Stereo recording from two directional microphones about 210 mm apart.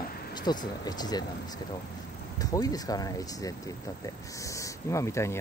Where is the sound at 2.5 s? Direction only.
15° left (ahead or behind).